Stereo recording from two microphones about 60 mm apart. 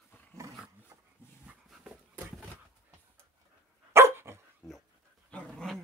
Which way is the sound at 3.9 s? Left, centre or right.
Right.